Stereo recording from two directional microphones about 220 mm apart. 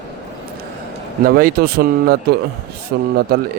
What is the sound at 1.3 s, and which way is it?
Speech, 40° right (ahead or behind).